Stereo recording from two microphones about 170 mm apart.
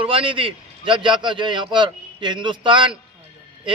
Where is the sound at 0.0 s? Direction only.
30° right (ahead or behind).